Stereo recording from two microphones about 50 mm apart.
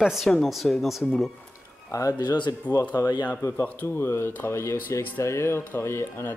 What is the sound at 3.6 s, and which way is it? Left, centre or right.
Speech, left.